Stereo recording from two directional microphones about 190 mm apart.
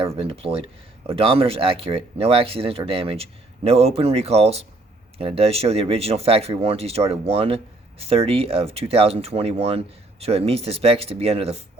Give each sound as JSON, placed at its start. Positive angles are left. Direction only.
{"t": 0.0, "sound": "speech", "side_deg": -30}